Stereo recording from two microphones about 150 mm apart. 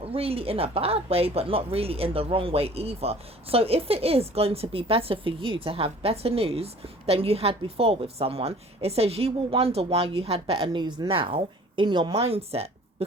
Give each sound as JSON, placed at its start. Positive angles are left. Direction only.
{"t": 0.0, "sound": "speech", "side_deg": -40}